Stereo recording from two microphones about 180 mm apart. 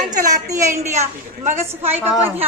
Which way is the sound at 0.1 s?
20° right (ahead or behind).